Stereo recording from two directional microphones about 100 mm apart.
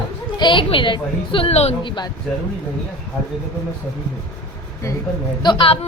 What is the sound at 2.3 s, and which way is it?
Speech, 5° left (ahead or behind).